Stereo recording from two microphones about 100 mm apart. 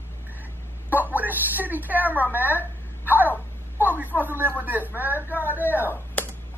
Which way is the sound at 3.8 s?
15° right (ahead or behind).